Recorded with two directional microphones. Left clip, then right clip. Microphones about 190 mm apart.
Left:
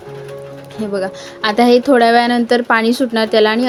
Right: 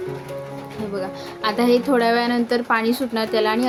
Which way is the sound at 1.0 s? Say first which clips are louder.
Left 8 dB; 30° left (ahead or behind).